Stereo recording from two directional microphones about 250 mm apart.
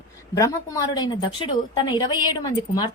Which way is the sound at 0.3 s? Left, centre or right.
Centre.